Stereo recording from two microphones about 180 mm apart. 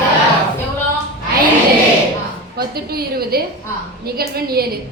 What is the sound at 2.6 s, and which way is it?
Speech, 60° right (ahead or behind).